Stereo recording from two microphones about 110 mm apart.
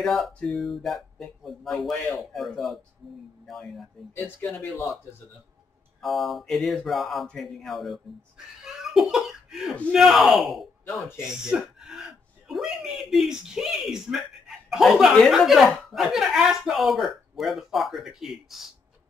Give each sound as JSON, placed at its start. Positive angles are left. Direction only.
{"t": 0.0, "sound": "speech", "side_deg": 0}
{"t": 4.1, "sound": "speech", "side_deg": 15}
{"t": 5.9, "sound": "speech", "side_deg": 0}